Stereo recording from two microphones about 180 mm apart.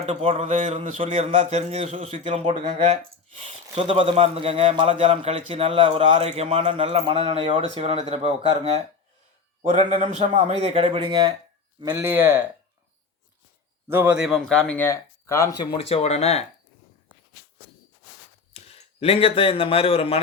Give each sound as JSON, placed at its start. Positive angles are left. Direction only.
{"t": 0.0, "sound": "speech", "side_deg": -35}
{"t": 12.0, "sound": "speech", "side_deg": -15}
{"t": 13.8, "sound": "speech", "side_deg": -10}
{"t": 18.5, "sound": "speech", "side_deg": 35}